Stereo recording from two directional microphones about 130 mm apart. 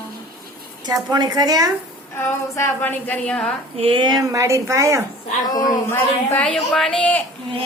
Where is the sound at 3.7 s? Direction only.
45° right (ahead or behind); by 5.0 s 25° right (ahead or behind).